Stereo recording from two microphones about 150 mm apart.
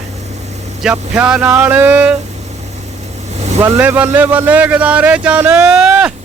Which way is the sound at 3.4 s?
45° right (ahead or behind).